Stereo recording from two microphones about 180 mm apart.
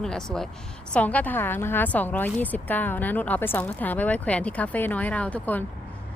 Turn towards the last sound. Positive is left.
turn(degrees=10)  # may be behind; listen again after turning